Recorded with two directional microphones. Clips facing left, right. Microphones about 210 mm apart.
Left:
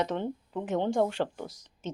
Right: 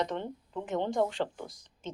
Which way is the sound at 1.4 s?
75° left (ahead or behind).